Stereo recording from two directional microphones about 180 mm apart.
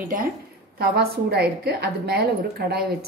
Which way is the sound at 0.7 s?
60° right (ahead or behind).